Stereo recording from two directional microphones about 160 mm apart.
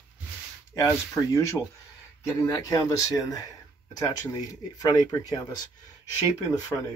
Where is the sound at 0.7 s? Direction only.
25° left (ahead or behind).